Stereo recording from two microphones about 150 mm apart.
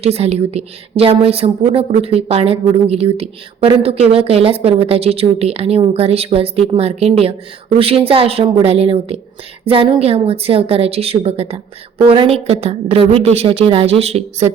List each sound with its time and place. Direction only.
0.0 s a woman's voice: 45° right (ahead or behind)